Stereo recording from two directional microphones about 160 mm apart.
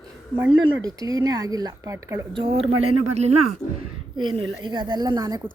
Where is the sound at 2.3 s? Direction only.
35° right (ahead or behind).